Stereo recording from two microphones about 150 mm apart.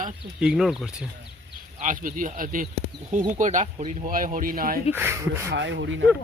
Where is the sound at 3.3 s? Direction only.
55° right (ahead or behind); by 4.8 s 70° right (ahead or behind).